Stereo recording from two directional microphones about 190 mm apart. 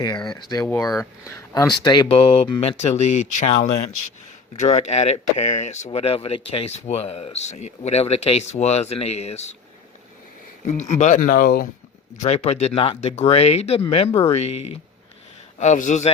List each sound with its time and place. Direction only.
0.3 s speech: 20° left (ahead or behind)
10.7 s speech: 40° left (ahead or behind)
12.1 s speech: 35° left (ahead or behind)